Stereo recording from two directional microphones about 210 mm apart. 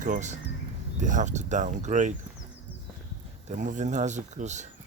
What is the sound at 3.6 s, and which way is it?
Speech, 35° right (ahead or behind).